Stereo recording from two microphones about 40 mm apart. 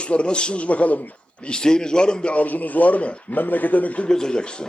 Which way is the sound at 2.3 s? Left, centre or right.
Left.